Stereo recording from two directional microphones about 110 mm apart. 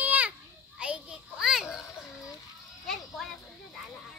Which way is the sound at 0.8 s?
10° right (ahead or behind).